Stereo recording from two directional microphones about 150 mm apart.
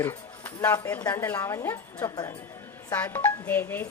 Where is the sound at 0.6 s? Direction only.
10° left (ahead or behind).